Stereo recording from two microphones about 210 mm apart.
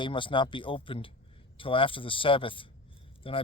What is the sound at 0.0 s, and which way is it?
A man's voice, 25° left (ahead or behind).